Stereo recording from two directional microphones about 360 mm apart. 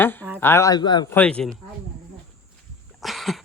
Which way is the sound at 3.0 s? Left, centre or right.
Centre.